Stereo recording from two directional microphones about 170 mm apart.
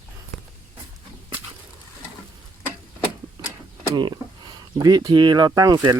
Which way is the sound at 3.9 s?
25° right (ahead or behind).